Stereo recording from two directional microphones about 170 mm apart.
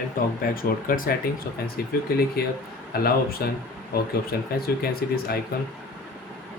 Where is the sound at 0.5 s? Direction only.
60° left (ahead or behind).